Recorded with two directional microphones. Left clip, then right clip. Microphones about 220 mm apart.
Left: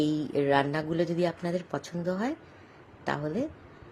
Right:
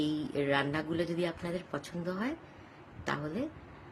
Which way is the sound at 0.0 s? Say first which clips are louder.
Left 5 dB; 15° left (ahead or behind).